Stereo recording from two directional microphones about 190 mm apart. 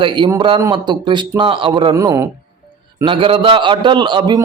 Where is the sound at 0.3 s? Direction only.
25° right (ahead or behind).